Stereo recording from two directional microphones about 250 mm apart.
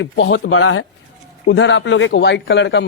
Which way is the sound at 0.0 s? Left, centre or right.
Left.